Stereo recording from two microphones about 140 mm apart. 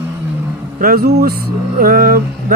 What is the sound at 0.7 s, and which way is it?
Speech, 90° right.